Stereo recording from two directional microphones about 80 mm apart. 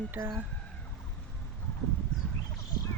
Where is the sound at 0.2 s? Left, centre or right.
Right.